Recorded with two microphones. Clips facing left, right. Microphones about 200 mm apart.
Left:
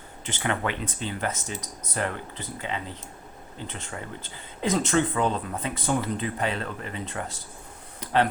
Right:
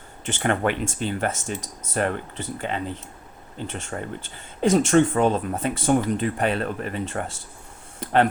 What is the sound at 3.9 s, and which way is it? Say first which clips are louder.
Speech: right 5 dB; 40° right (ahead or behind).